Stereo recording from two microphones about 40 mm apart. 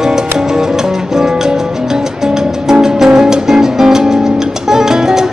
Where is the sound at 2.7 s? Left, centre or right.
Centre.